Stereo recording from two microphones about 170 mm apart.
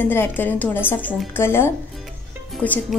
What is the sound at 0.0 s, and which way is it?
A woman's voice, 10° left (ahead or behind).